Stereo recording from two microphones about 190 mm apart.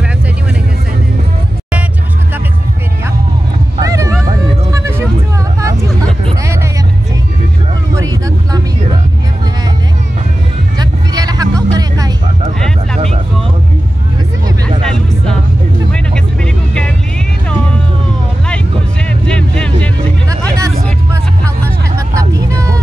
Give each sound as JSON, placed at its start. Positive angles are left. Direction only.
{"t": 3.8, "sound": "dog", "side_deg": -15}
{"t": 4.7, "sound": "music", "side_deg": -15}
{"t": 5.6, "sound": "vehicle", "side_deg": -15}
{"t": 10.8, "sound": "vehicle", "side_deg": -20}
{"t": 14.8, "sound": "music", "side_deg": 5}
{"t": 19.2, "sound": "music", "side_deg": 5}
{"t": 21.6, "sound": "vehicle", "side_deg": -15}